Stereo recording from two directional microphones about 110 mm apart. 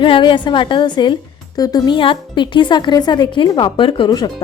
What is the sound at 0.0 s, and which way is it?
A woman's voice, 50° left (ahead or behind).